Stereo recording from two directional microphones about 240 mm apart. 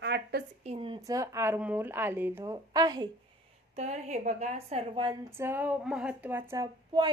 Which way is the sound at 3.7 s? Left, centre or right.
Right.